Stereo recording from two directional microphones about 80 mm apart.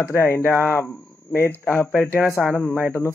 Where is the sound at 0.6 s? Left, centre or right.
Left.